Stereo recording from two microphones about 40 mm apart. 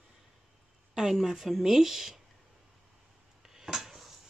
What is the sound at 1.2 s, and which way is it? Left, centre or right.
Speech, centre.